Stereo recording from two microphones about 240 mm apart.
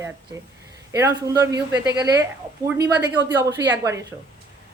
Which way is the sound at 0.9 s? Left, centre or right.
Centre.